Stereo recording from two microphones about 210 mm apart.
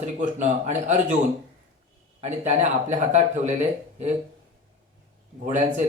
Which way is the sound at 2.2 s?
30° right (ahead or behind).